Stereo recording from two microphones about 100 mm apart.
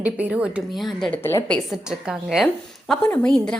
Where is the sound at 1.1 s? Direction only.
25° left (ahead or behind).